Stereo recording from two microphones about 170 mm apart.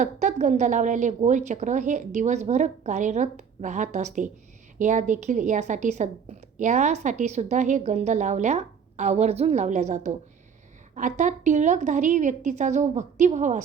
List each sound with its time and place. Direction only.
0.0 s a woman's voice: 45° right (ahead or behind)